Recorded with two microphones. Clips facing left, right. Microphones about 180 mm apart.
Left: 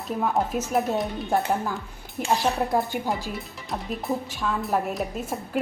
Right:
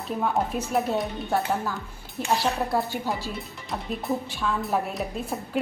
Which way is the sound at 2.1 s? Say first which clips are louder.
Left 1 dB; 20° left (ahead or behind).